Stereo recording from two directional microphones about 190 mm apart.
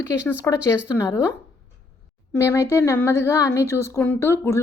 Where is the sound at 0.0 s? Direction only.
15° left (ahead or behind).